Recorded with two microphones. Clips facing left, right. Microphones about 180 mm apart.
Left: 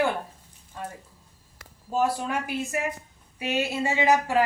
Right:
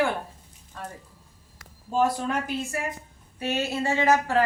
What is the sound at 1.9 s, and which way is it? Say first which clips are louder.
A woman's voice: right 1 dB; 5° left (ahead or behind).